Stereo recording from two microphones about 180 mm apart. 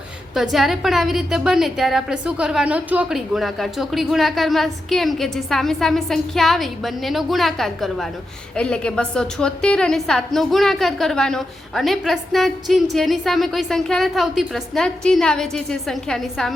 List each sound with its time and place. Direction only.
0.5 s a woman's voice: centre (ahead or behind)